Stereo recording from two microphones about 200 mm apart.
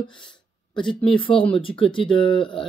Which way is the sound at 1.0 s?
25° left (ahead or behind).